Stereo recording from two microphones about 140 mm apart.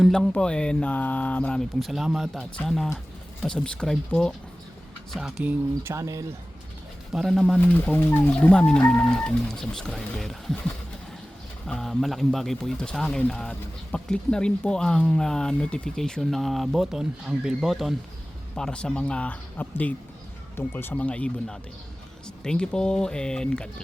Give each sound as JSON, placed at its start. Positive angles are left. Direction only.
{"t": 0.0, "sound": "speech", "side_deg": 5}
{"t": 5.1, "sound": "speech", "side_deg": -10}
{"t": 5.9, "sound": "speech", "side_deg": -20}
{"t": 7.1, "sound": "speech", "side_deg": 0}
{"t": 7.6, "sound": "speech", "side_deg": 10}
{"t": 11.6, "sound": "speech", "side_deg": 0}